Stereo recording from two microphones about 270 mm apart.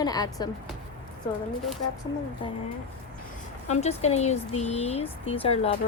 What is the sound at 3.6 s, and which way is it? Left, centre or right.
Speech, left.